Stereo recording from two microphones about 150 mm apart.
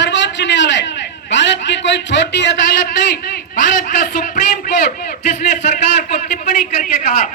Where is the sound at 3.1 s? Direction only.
60° left (ahead or behind).